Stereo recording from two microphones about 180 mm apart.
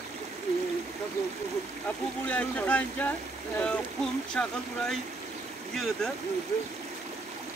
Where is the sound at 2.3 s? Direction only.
5° left (ahead or behind).